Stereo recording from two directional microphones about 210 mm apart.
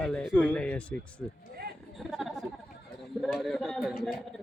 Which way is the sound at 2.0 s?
Centre (ahead or behind).